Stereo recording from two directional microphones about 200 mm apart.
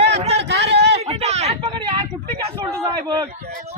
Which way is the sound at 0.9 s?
30° right (ahead or behind).